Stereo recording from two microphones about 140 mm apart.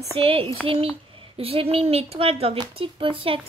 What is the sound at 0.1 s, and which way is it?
Speech, 40° right (ahead or behind).